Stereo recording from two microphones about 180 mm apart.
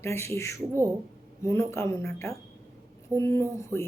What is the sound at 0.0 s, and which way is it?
Speech, 15° left (ahead or behind).